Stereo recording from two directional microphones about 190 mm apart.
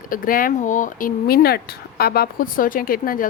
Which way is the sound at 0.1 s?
45° left (ahead or behind).